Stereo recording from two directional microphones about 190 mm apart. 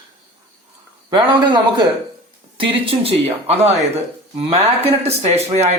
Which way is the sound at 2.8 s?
30° right (ahead or behind).